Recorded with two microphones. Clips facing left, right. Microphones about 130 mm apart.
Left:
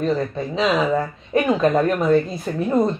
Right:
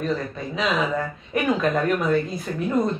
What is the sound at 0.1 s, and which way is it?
Speech, 30° left (ahead or behind).